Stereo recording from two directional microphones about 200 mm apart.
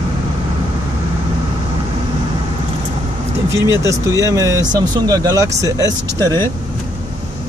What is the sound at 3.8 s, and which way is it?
Speech, 15° right (ahead or behind).